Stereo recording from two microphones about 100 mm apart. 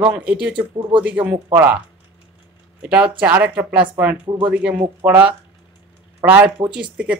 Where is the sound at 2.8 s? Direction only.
10° right (ahead or behind).